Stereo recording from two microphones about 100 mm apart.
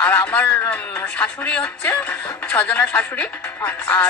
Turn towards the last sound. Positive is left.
turn(degrees=20)  # may be behind; listen again after turning